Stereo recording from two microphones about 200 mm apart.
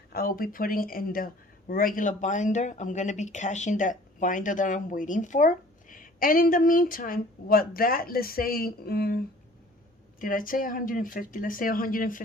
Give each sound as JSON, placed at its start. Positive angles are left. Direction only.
{"t": 0.1, "sound": "speech", "side_deg": 45}